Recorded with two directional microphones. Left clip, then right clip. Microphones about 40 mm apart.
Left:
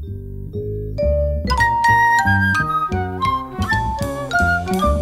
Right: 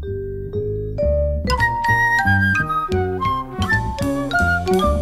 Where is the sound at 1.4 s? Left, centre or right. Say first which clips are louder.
Left 3 dB; right.